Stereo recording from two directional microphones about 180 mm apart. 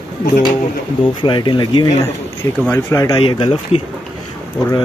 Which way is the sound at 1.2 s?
25° left (ahead or behind).